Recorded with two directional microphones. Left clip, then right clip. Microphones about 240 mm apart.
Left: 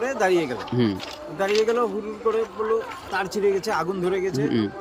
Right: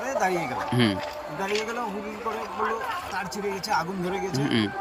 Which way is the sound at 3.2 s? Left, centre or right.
Left.